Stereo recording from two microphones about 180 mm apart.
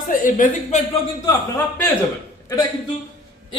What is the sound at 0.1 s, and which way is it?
Speech, 45° left (ahead or behind).